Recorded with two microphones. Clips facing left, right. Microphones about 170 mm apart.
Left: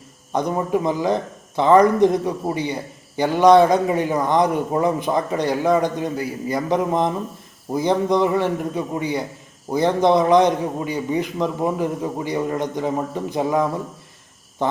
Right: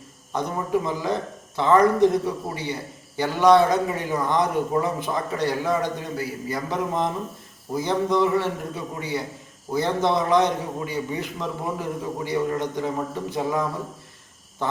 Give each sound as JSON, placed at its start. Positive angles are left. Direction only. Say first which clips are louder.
{"t": 0.3, "sound": "a man's voice", "louder": "left 4 dB", "side_deg": 15}